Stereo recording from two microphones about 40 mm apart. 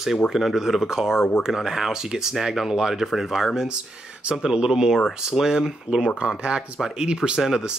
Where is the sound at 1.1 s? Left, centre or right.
Left.